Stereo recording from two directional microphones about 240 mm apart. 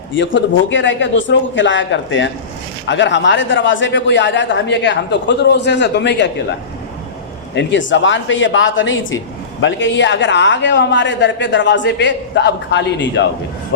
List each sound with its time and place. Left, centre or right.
0.2 s speech: left